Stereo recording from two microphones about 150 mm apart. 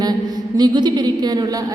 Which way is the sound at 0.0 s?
25° right (ahead or behind).